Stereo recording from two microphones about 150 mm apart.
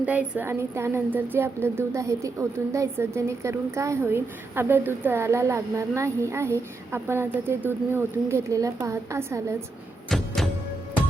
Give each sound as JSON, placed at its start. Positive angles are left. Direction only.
{"t": 0.0, "sound": "a woman's voice", "side_deg": -10}
{"t": 10.1, "sound": "music", "side_deg": 0}